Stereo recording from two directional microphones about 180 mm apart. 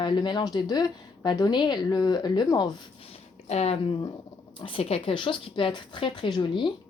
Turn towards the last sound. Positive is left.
turn(degrees=25)  # may be behind; listen again after turning